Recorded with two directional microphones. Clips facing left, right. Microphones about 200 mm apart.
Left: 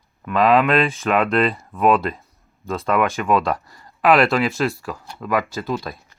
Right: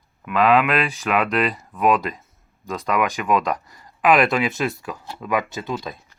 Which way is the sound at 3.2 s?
Centre (ahead or behind).